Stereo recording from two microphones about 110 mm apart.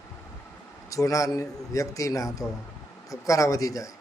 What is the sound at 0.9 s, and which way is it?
A man's voice, 30° left (ahead or behind).